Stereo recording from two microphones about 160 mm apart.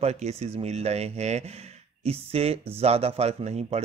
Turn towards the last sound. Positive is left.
turn(degrees=-40)  # may be behind; listen again after turning